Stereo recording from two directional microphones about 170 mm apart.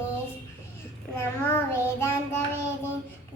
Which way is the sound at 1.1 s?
15° left (ahead or behind).